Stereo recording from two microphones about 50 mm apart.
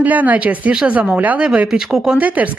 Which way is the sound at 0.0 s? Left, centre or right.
Right.